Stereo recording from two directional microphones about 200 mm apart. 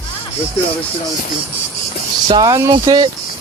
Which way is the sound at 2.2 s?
20° right (ahead or behind).